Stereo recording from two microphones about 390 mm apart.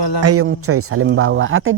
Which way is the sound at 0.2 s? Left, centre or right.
Right.